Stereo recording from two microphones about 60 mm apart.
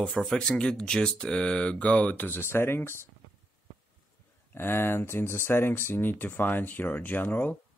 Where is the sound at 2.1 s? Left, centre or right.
Left.